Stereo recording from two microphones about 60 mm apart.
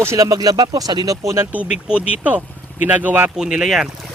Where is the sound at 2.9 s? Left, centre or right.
Right.